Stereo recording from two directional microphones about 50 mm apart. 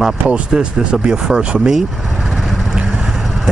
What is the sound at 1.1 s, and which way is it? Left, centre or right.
Speech, centre.